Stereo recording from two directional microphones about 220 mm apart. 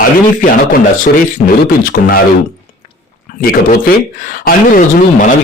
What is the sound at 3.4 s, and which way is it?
A man's voice, 40° left (ahead or behind).